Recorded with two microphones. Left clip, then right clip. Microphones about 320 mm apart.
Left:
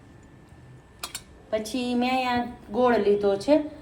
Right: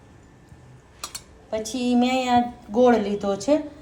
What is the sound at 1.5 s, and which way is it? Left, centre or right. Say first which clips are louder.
A woman's voice: right 3 dB; centre.